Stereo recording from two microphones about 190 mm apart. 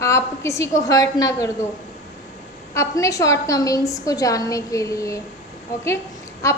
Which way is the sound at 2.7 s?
15° left (ahead or behind).